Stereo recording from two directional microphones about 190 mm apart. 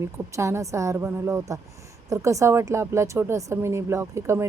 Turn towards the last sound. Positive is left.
turn(degrees=-15)  # may be behind; listen again after turning